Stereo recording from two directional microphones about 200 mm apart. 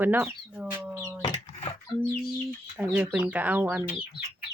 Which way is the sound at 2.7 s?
5° right (ahead or behind).